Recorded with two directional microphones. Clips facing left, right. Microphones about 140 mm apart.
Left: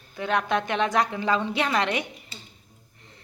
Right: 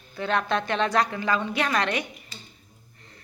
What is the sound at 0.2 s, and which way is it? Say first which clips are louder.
Cutlery: even; 15° left (ahead or behind).